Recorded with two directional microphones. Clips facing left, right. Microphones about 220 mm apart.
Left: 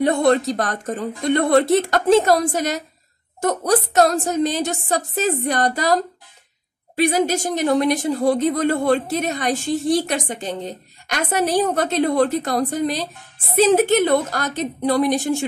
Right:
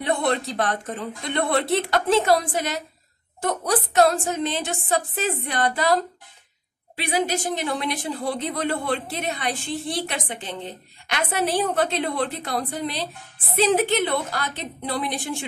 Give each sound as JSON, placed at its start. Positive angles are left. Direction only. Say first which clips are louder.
{"t": 0.0, "sound": "a woman's voice", "louder": "left 7 dB", "side_deg": 40}
{"t": 7.0, "sound": "speech", "louder": "left 6 dB", "side_deg": 45}